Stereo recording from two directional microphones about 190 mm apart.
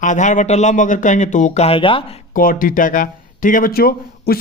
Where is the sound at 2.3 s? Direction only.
45° left (ahead or behind).